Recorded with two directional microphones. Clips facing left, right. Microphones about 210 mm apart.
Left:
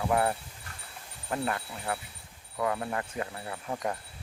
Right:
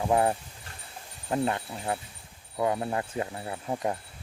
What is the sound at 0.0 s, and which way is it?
Speech, 20° right (ahead or behind).